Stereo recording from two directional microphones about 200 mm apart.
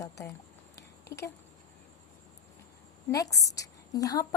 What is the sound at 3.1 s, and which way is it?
A woman's voice, 15° left (ahead or behind).